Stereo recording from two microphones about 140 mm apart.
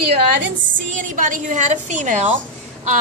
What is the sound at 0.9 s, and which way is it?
A woman's voice, 70° right (ahead or behind).